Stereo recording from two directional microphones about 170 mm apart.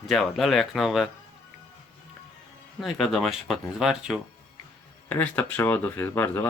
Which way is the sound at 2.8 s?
Centre (ahead or behind).